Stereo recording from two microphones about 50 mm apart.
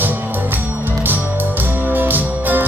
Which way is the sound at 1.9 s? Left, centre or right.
Right.